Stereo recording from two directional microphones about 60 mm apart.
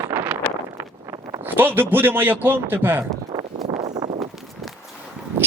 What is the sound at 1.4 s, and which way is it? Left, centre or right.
A man's voice, right.